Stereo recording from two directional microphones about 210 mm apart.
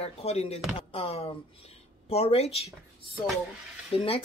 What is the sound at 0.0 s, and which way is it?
Speech, 30° left (ahead or behind).